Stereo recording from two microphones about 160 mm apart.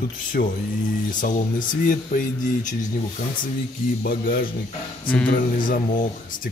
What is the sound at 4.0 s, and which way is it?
Speech, 60° left (ahead or behind).